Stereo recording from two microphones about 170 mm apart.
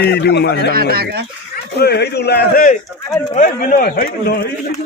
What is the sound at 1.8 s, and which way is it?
Speech, 75° left (ahead or behind).